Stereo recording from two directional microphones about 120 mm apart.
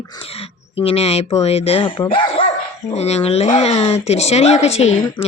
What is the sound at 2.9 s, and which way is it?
Speech, 65° left (ahead or behind).